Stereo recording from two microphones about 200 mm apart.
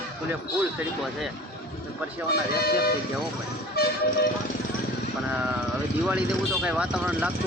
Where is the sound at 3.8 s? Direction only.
50° left (ahead or behind).